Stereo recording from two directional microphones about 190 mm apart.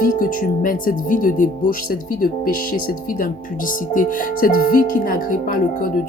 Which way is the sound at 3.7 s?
45° left (ahead or behind).